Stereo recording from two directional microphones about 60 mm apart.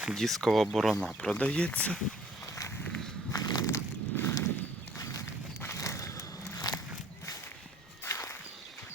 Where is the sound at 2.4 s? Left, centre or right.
Left.